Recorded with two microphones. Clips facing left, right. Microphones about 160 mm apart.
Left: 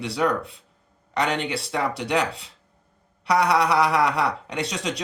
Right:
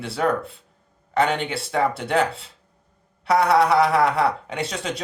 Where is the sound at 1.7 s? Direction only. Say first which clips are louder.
Right 3 dB; 50° right (ahead or behind).